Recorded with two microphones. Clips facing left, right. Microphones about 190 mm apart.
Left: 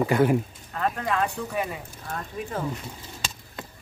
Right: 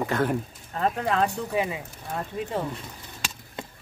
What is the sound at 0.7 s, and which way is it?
Speech, 30° right (ahead or behind).